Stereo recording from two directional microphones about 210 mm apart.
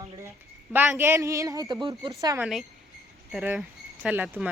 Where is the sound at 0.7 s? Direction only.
10° right (ahead or behind).